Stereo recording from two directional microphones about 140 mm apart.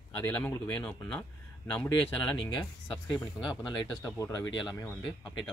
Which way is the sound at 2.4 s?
35° left (ahead or behind).